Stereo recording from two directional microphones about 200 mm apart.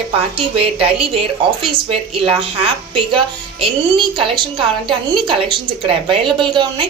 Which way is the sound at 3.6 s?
25° right (ahead or behind).